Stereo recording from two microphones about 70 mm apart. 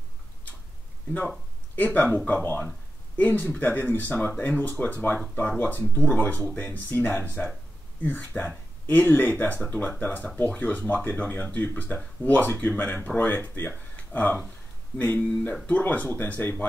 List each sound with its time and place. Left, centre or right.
1.8 s speech: centre
8.0 s speech: left